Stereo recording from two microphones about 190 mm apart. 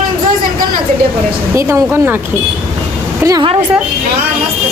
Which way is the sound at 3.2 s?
20° right (ahead or behind).